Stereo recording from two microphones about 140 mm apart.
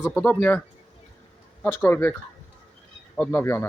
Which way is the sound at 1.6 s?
15° left (ahead or behind).